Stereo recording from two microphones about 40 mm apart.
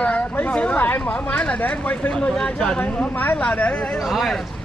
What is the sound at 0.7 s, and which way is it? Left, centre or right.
Speech, left.